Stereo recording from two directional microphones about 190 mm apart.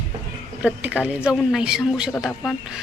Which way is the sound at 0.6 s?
5° right (ahead or behind).